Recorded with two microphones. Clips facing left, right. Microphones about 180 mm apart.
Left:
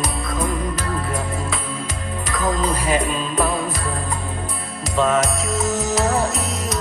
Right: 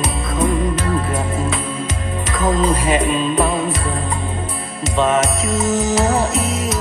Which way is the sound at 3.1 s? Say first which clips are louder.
Right 4 dB; 25° right (ahead or behind).